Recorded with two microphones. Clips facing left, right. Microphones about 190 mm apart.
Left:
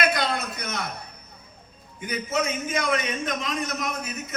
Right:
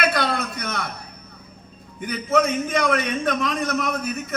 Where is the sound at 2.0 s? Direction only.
60° right (ahead or behind).